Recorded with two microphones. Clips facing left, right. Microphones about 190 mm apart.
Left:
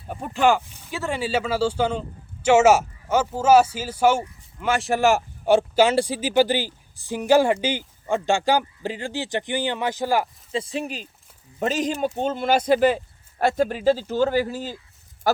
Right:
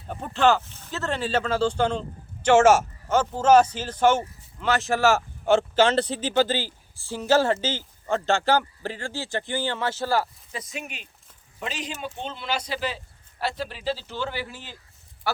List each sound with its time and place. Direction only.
0.1 s speech: 10° left (ahead or behind)
10.5 s speech: 30° left (ahead or behind)